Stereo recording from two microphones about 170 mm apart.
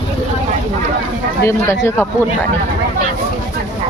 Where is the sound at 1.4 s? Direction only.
15° left (ahead or behind).